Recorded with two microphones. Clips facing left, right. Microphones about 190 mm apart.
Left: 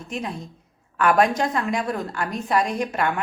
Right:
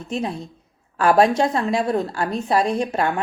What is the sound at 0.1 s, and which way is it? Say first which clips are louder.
A woman's voice: right 5 dB; 30° right (ahead or behind).